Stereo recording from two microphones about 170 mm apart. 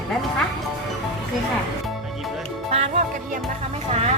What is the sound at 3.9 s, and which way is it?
Speech, 40° right (ahead or behind).